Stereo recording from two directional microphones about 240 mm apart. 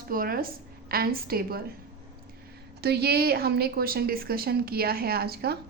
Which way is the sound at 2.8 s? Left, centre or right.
Right.